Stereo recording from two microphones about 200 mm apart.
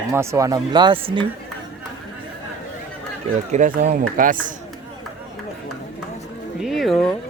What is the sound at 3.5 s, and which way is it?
A man's voice, 40° right (ahead or behind).